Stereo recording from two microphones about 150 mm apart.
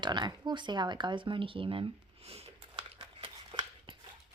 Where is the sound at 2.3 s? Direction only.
40° right (ahead or behind).